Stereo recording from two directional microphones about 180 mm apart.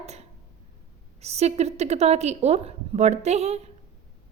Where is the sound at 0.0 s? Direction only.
35° right (ahead or behind).